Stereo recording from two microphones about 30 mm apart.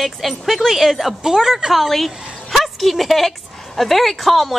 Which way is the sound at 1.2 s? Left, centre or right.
Centre.